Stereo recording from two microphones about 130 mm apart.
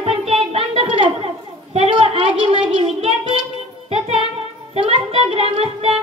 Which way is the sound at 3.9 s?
50° right (ahead or behind).